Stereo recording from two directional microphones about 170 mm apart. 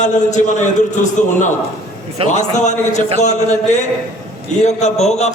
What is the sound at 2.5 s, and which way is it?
A man's voice, 45° left (ahead or behind).